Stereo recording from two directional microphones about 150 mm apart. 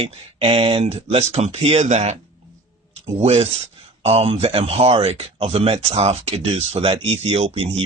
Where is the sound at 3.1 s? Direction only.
40° right (ahead or behind).